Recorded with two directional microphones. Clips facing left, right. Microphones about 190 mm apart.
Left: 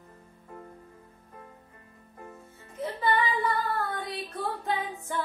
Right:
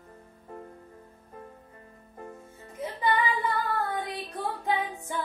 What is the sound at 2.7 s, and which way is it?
Music, 15° right (ahead or behind).